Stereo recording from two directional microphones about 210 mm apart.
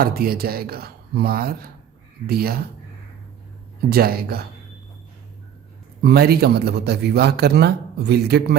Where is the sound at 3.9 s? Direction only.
45° right (ahead or behind).